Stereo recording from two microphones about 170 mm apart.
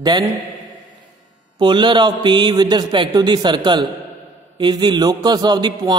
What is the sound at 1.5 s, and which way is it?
A man's voice, 25° right (ahead or behind).